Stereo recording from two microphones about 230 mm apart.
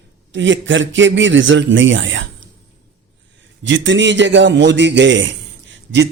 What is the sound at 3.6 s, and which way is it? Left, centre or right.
A man's voice, right.